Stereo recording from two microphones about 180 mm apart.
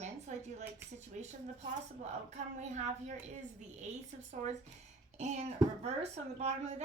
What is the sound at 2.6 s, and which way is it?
A woman's voice, 40° right (ahead or behind).